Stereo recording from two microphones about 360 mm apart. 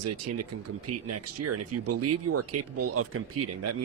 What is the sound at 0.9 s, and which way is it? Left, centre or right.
Speech, right.